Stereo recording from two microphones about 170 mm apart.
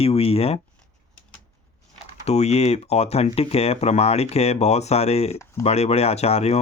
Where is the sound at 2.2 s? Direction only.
40° left (ahead or behind).